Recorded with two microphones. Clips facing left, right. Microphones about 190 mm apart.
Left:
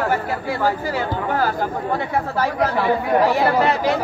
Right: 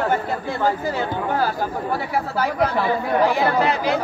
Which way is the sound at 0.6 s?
20° right (ahead or behind).